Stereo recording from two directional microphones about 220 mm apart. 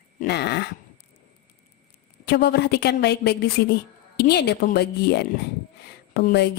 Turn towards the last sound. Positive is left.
turn(degrees=45)  # may be behind; listen again after turning